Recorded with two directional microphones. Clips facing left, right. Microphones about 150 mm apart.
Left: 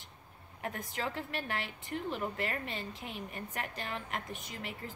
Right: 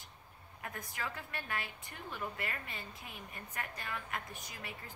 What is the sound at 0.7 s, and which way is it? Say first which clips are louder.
A woman's voice: left 5 dB; 25° left (ahead or behind).